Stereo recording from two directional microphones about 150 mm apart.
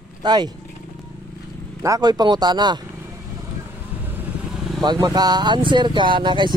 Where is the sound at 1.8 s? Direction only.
25° right (ahead or behind).